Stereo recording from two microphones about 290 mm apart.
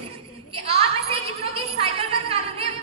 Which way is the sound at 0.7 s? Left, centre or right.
Right.